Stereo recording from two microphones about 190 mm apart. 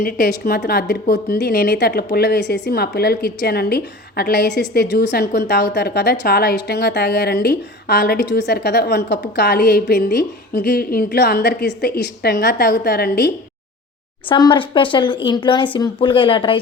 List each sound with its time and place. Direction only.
0.0 s a woman's voice: 55° left (ahead or behind)
14.3 s speech: 25° left (ahead or behind)